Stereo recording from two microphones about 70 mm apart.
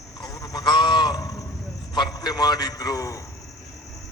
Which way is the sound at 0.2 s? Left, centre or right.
Left.